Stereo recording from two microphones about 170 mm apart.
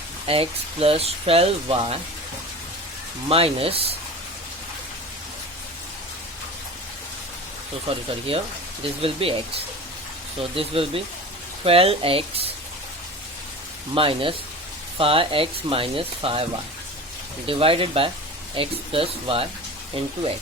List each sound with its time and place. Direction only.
0.3 s speech: 35° right (ahead or behind)
3.2 s speech: 35° right (ahead or behind)
8.3 s speech: 35° right (ahead or behind)
13.9 s speech: 30° right (ahead or behind)